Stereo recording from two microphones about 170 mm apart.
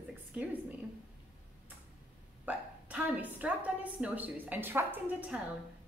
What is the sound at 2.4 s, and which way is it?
A woman's voice, 10° right (ahead or behind).